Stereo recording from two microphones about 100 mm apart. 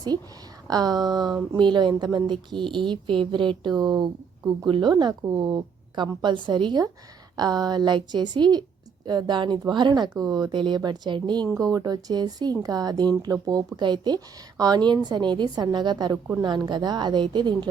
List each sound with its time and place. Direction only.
0.7 s a woman's voice: 40° right (ahead or behind)